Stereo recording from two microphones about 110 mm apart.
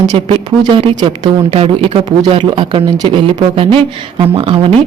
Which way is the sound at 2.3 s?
50° right (ahead or behind).